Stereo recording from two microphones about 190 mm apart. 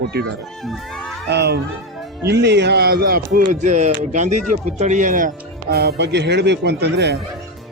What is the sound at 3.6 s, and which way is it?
Speech, 40° right (ahead or behind).